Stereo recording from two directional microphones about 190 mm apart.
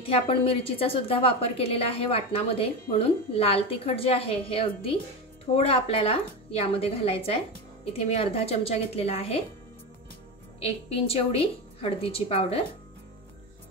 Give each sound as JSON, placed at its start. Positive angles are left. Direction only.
{"t": 0.0, "sound": "a woman's voice", "side_deg": 30}
{"t": 10.6, "sound": "a woman's voice", "side_deg": 30}